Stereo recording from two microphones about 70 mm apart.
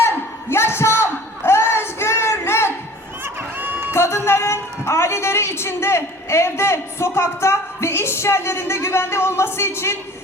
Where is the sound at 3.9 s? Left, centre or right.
Left.